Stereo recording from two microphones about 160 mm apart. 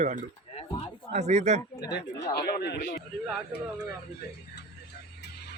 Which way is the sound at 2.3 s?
85° left.